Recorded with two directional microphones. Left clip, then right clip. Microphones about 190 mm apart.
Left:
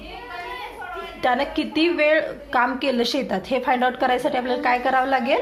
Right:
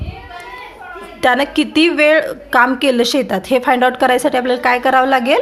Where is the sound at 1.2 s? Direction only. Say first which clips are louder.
Right 8 dB; 40° right (ahead or behind).